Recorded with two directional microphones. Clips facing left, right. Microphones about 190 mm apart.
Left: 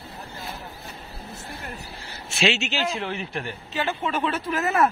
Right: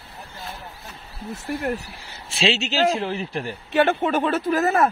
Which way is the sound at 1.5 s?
70° right (ahead or behind).